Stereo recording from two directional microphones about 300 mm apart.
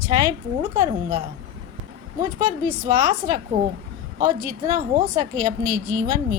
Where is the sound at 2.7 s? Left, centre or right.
Right.